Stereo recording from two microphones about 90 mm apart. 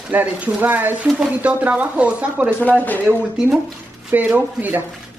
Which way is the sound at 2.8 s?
20° left (ahead or behind).